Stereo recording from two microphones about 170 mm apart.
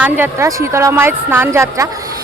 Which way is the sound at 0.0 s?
15° right (ahead or behind).